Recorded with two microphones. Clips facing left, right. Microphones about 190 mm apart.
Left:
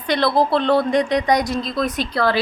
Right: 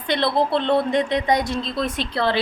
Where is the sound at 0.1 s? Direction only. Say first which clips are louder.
Left 3 dB; 25° right (ahead or behind).